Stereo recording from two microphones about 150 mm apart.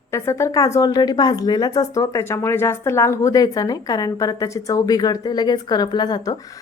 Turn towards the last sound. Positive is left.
turn(degrees=25)  # may be behind; listen again after turning